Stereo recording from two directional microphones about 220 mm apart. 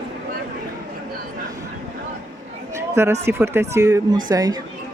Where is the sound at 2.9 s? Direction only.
10° right (ahead or behind).